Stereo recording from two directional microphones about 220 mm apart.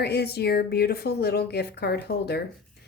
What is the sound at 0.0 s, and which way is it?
Speech, 45° left (ahead or behind).